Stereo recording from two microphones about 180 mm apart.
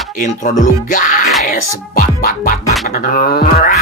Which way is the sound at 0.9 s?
45° left (ahead or behind).